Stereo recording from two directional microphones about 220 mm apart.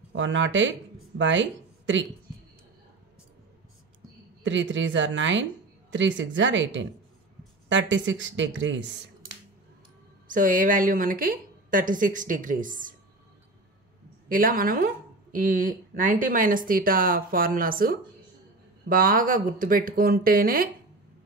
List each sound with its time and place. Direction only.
0.1 s speech: 55° right (ahead or behind)
4.4 s a woman's voice: 55° right (ahead or behind)
10.2 s a woman's voice: 35° right (ahead or behind)
14.3 s a woman's voice: 40° right (ahead or behind)